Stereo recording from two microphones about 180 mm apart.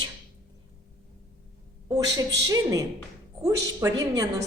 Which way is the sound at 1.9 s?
20° right (ahead or behind).